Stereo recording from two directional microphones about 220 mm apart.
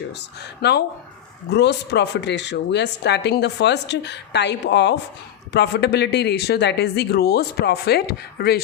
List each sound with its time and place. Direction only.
0.6 s speech: 45° left (ahead or behind)